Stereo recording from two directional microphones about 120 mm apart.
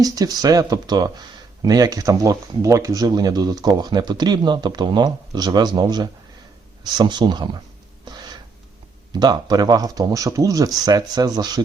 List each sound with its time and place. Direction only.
0.0 s speech: 30° right (ahead or behind)
8.0 s a sound: 35° right (ahead or behind)
9.1 s speech: 35° right (ahead or behind)